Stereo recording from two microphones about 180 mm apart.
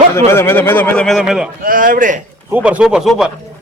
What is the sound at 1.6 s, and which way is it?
Speech, 50° right (ahead or behind).